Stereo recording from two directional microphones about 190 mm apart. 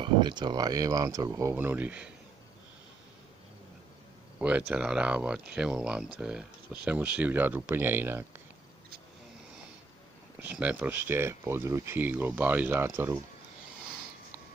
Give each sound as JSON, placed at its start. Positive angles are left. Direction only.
{"t": 0.0, "sound": "speech", "side_deg": -25}
{"t": 4.4, "sound": "speech", "side_deg": -5}
{"t": 10.4, "sound": "speech", "side_deg": -5}